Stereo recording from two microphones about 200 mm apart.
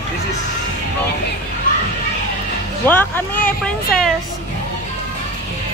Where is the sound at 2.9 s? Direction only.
10° left (ahead or behind).